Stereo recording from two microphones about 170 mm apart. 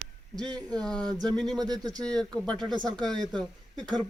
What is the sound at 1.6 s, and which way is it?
Speech, 20° right (ahead or behind).